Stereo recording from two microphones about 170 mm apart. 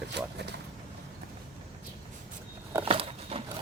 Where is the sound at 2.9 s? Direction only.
35° right (ahead or behind).